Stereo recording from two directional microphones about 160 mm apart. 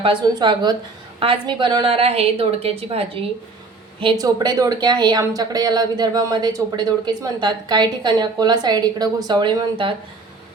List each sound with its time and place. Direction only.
0.0 s a woman's voice: 30° right (ahead or behind)
4.0 s speech: 25° right (ahead or behind)